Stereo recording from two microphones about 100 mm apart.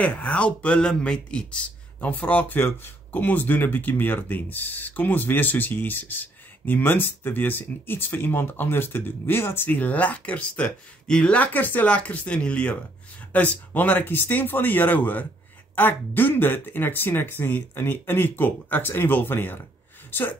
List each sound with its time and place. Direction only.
0.0 s speech: 15° left (ahead or behind)